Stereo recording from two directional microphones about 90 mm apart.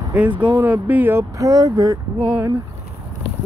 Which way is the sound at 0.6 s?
20° right (ahead or behind).